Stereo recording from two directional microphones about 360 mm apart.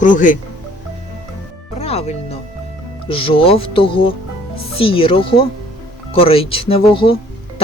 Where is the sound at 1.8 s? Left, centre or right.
Centre.